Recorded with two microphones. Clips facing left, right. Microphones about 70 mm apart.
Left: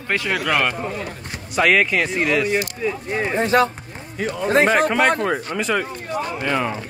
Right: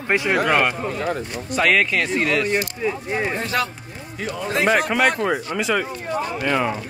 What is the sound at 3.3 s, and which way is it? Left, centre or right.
Speech, left.